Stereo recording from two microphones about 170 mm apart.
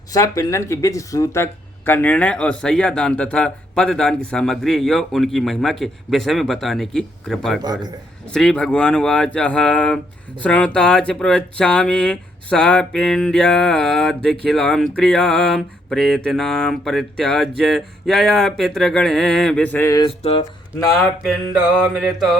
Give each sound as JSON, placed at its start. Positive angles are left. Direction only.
{"t": 0.1, "sound": "speech", "side_deg": 20}
{"t": 7.6, "sound": "a man's voice", "side_deg": -25}
{"t": 8.3, "sound": "speech", "side_deg": 5}
{"t": 20.0, "sound": "speech", "side_deg": 30}
{"t": 21.2, "sound": "speech", "side_deg": 0}